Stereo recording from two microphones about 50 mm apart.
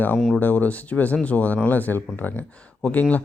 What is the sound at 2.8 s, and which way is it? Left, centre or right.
Speech, left.